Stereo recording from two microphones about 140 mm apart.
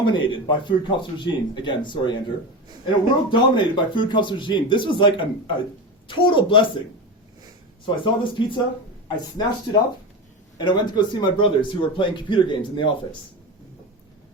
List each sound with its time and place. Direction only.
0.0 s a man's voice: 35° left (ahead or behind)
7.9 s a man's voice: 35° left (ahead or behind)
10.6 s a man's voice: 30° left (ahead or behind)